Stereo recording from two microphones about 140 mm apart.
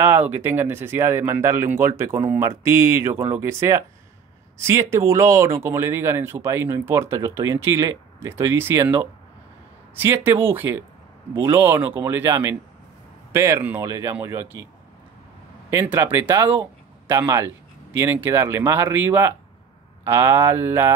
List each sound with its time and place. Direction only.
0.0 s speech: 15° right (ahead or behind)
15.7 s speech: 15° right (ahead or behind)